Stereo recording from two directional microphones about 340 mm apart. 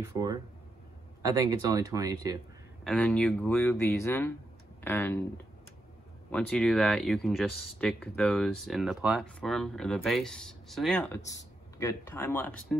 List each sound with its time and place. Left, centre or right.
1.2 s speech: centre
2.8 s speech: centre
6.3 s speech: centre